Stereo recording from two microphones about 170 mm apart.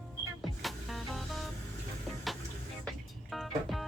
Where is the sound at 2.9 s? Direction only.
Centre (ahead or behind).